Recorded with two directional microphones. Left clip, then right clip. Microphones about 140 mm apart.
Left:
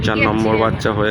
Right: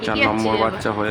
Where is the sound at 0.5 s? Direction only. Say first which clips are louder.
Left 3 dB; 10° left (ahead or behind).